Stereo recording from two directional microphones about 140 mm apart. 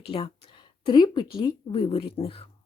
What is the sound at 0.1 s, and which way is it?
Speech, 40° left (ahead or behind).